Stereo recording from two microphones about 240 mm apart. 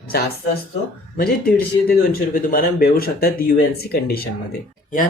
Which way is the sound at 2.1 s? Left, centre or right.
Left.